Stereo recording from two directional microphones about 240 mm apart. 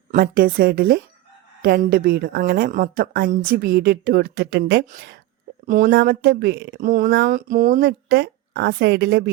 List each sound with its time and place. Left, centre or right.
0.1 s a woman's voice: right